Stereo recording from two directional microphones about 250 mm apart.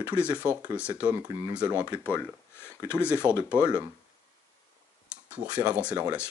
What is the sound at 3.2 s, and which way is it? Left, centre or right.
Speech, centre.